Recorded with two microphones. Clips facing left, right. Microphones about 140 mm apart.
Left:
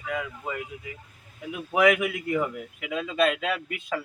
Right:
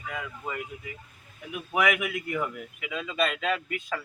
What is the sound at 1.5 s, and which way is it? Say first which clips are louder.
Speech: left 5 dB; 25° left (ahead or behind).